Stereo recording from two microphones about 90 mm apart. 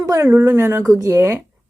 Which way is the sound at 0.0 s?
40° right (ahead or behind).